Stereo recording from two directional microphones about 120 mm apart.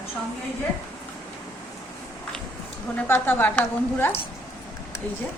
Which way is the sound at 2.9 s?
20° left (ahead or behind).